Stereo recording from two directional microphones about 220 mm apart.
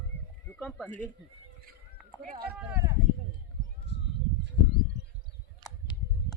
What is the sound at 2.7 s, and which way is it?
Speech, 15° right (ahead or behind).